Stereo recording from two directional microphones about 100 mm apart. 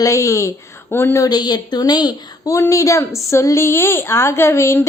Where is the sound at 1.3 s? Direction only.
45° left (ahead or behind).